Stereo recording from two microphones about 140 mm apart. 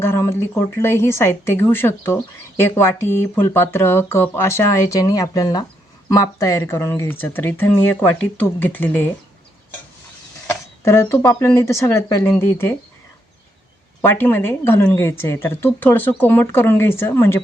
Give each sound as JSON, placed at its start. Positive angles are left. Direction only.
{"t": 0.0, "sound": "speech", "side_deg": 20}
{"t": 10.5, "sound": "speech", "side_deg": 20}
{"t": 14.0, "sound": "speech", "side_deg": 15}